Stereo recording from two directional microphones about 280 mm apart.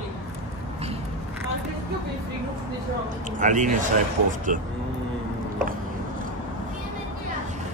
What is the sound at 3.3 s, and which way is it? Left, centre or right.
Speech, right.